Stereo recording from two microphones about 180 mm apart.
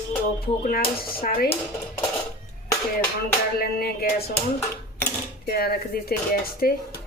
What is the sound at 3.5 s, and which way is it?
Speech, 55° left (ahead or behind).